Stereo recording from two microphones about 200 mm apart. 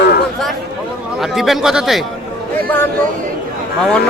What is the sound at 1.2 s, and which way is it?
Speech, centre (ahead or behind).